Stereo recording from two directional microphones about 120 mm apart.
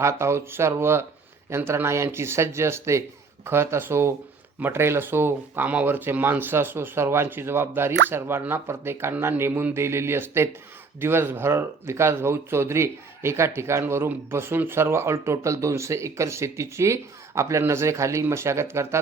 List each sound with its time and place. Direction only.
0.0 s speech: 25° right (ahead or behind)